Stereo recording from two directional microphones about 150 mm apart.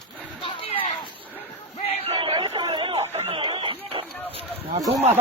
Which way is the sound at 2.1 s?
35° right (ahead or behind).